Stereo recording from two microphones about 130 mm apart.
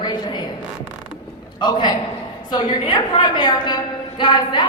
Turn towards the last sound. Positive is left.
turn(degrees=35)  # may be behind; listen again after turning